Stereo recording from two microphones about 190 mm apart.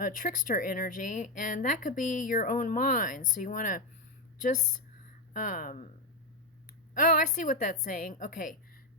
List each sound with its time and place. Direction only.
0.0 s speech: 45° left (ahead or behind)
5.3 s speech: 45° left (ahead or behind)
6.9 s speech: 45° left (ahead or behind)